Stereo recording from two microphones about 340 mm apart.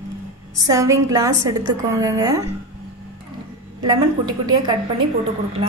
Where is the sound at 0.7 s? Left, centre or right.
Centre.